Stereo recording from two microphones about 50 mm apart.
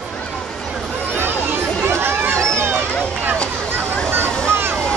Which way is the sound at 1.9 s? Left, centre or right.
Right.